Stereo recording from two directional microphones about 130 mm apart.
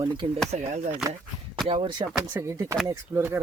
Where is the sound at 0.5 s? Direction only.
65° right (ahead or behind).